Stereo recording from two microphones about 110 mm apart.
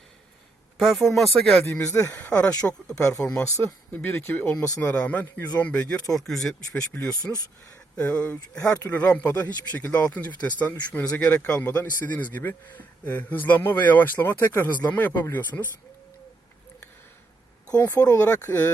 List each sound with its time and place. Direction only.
0.8 s speech: centre (ahead or behind)
1.6 s speech: 20° left (ahead or behind)
2.5 s a man's voice: 35° left (ahead or behind); by 5.5 s 15° left (ahead or behind)
6.1 s a man's voice: 5° left (ahead or behind)
17.7 s speech: 15° left (ahead or behind)
17.9 s speech: 25° left (ahead or behind)